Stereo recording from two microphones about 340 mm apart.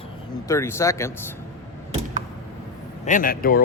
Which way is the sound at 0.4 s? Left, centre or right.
Centre.